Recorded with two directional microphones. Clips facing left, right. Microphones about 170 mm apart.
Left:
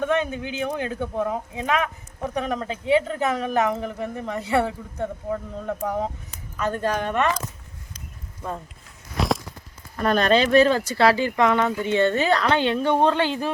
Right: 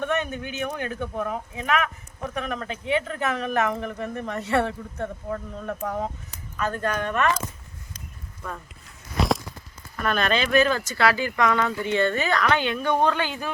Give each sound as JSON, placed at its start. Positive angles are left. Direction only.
{"t": 0.0, "sound": "speech", "side_deg": 15}
{"t": 9.1, "sound": "walk", "side_deg": 0}
{"t": 9.9, "sound": "speech", "side_deg": 35}